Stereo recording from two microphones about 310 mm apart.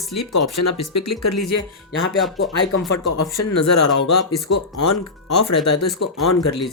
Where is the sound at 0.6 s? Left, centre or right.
Left.